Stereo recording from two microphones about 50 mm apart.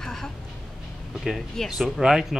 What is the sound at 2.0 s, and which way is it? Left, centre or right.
Speech, centre.